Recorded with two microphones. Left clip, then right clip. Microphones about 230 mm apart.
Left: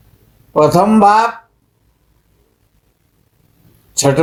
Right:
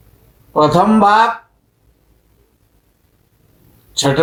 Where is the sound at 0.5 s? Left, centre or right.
Left.